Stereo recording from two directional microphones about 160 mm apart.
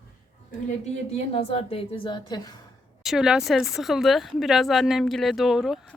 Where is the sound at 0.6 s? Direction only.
40° left (ahead or behind).